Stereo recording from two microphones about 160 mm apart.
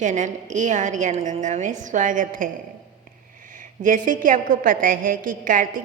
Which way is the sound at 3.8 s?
55° right (ahead or behind).